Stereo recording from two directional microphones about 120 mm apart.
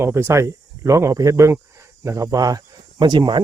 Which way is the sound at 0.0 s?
20° right (ahead or behind).